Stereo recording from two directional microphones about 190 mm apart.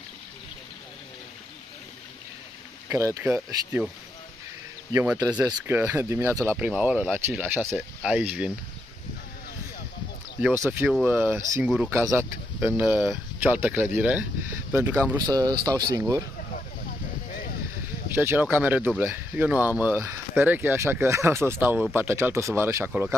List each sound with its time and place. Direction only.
2.9 s speech: 15° right (ahead or behind)
4.9 s speech: 15° right (ahead or behind)
10.7 s speech: 5° right (ahead or behind)
18.1 s speech: 10° right (ahead or behind)